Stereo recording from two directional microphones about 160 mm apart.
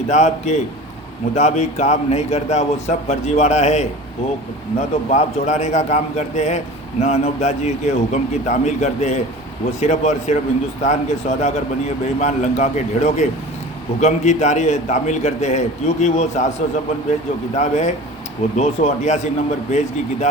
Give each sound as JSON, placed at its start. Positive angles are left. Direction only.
{"t": 0.1, "sound": "a man's voice", "side_deg": 45}